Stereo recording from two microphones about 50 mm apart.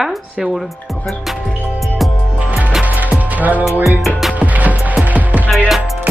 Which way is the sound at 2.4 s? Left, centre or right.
Right.